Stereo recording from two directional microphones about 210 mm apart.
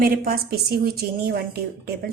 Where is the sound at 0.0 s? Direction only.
45° right (ahead or behind).